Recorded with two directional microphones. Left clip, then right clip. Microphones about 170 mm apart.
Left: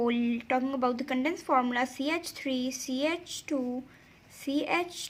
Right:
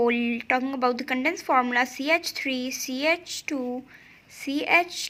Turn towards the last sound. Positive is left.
turn(degrees=-20)  # may be behind; listen again after turning